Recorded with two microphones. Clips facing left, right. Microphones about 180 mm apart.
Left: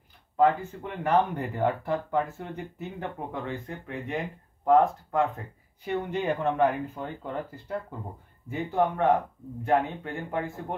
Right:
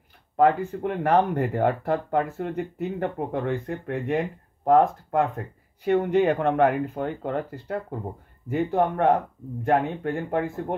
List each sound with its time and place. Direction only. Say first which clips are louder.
0.4 s speech: right 3 dB; 55° right (ahead or behind)